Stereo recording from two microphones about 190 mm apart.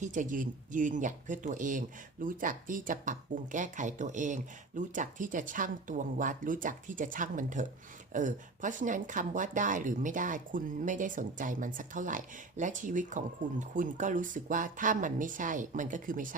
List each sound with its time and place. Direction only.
0.0 s speech: 40° right (ahead or behind)